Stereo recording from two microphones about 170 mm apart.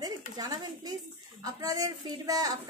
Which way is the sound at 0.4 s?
25° right (ahead or behind).